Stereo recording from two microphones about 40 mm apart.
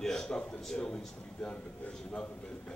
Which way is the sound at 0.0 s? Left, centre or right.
Centre.